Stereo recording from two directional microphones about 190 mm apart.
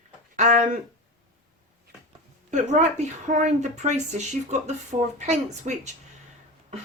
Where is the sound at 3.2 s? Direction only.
40° right (ahead or behind).